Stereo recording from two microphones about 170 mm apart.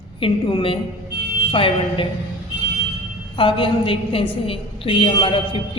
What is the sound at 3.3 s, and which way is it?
A woman's voice, 30° left (ahead or behind).